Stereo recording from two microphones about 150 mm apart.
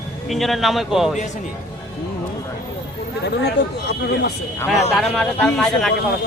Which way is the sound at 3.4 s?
90° left.